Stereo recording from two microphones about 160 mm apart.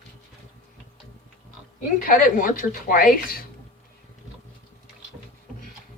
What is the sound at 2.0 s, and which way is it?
A woman's voice, 60° left (ahead or behind).